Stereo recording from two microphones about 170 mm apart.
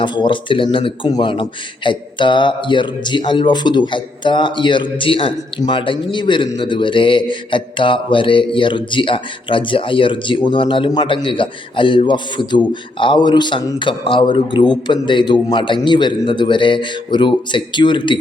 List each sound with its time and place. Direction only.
0.0 s speech: 30° left (ahead or behind)